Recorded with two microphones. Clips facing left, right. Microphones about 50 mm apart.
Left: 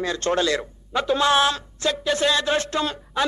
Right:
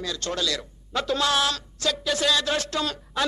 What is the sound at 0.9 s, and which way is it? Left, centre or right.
Speech, left.